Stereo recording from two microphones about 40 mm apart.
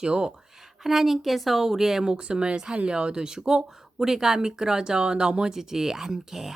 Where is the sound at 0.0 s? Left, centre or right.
Right.